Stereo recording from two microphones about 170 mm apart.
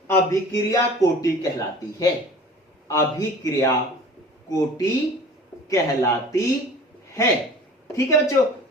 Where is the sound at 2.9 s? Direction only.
20° left (ahead or behind).